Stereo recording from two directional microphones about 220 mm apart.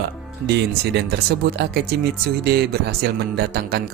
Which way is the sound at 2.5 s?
45° right (ahead or behind).